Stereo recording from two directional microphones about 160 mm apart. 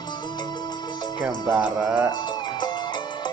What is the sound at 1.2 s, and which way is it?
Speech, 10° right (ahead or behind).